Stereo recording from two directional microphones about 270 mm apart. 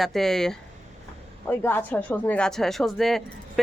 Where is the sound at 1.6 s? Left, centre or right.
Centre.